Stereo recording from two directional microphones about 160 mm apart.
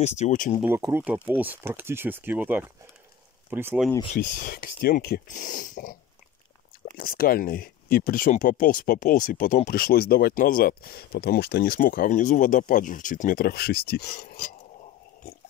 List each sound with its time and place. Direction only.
0.0 s speech: 45° left (ahead or behind)
0.6 s speech: 15° right (ahead or behind)
4.1 s speech: 50° left (ahead or behind)
7.0 s speech: 65° left (ahead or behind)
9.7 s speech: 70° left (ahead or behind)